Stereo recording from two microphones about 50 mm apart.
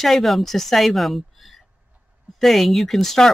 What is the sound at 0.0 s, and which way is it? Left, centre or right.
Speech, centre.